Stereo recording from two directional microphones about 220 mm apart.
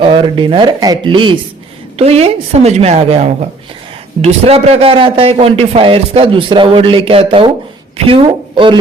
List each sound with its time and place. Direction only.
0.0 s a man's voice: 20° right (ahead or behind)